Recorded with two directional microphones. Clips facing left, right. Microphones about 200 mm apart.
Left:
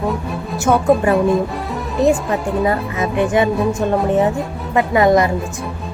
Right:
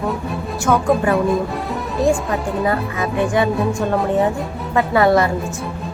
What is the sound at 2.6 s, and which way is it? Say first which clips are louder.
Speech: left 1 dB; 20° left (ahead or behind).